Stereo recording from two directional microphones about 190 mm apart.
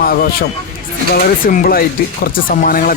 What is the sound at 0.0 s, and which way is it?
Speech, 50° left (ahead or behind).